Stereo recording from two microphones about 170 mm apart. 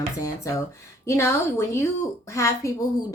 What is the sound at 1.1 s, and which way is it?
Speech, 15° left (ahead or behind).